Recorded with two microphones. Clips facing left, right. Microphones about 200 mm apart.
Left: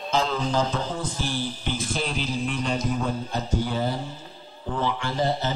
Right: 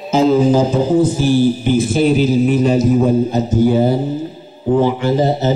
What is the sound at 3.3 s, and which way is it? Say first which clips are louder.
Speech: right 14 dB; 5° right (ahead or behind).